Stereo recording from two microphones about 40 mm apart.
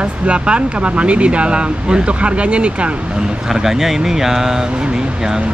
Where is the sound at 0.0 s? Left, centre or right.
Right.